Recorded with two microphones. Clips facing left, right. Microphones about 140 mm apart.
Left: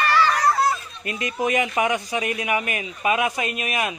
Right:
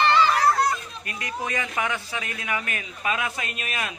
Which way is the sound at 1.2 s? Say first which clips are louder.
Left 7 dB; 20° left (ahead or behind).